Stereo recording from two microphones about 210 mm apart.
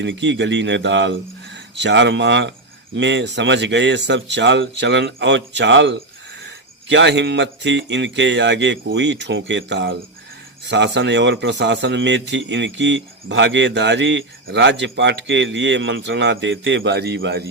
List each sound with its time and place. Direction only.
0.0 s a man's voice: 60° right (ahead or behind)